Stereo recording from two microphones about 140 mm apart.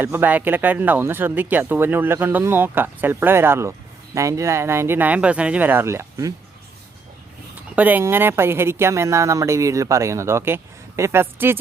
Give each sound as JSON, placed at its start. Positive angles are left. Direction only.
{"t": 0.0, "sound": "speech", "side_deg": -15}
{"t": 7.8, "sound": "speech", "side_deg": -10}